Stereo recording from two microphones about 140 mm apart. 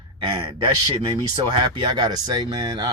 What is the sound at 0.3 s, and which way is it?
Speech, 35° right (ahead or behind).